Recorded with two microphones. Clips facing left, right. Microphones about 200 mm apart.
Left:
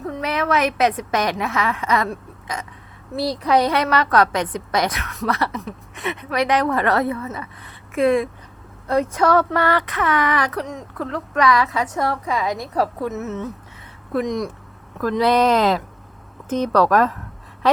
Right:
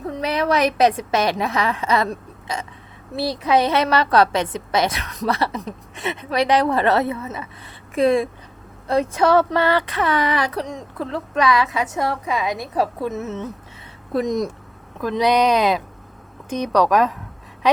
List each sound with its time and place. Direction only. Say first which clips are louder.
0.1 s a woman's voice: right 1 dB; 35° right (ahead or behind)
14.1 s speech: right 1 dB; 35° right (ahead or behind)
15.0 s speech: left 1 dB; 20° right (ahead or behind)